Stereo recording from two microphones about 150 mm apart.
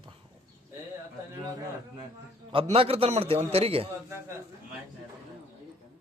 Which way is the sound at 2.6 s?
40° right (ahead or behind).